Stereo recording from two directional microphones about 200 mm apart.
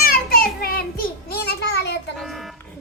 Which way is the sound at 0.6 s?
50° left (ahead or behind).